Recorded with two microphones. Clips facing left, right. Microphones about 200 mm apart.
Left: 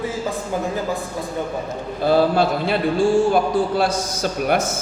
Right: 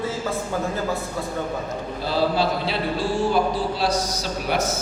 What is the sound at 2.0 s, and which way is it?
A man's voice, 50° left (ahead or behind).